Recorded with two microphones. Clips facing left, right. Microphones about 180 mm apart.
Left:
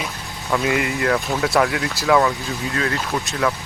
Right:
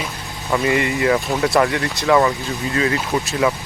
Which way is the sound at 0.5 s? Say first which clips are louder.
Right 2 dB; centre (ahead or behind).